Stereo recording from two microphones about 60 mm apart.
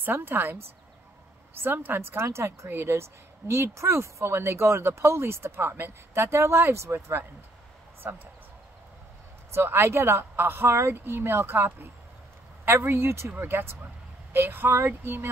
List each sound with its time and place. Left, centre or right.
0.0 s speech: right
1.6 s a woman's voice: right
9.5 s speech: right